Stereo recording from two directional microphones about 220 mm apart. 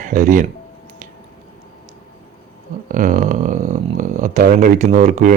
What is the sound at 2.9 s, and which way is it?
Speech, 35° right (ahead or behind).